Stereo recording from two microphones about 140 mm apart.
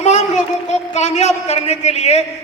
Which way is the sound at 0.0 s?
55° left (ahead or behind).